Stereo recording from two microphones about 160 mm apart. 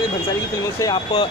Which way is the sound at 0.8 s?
30° left (ahead or behind).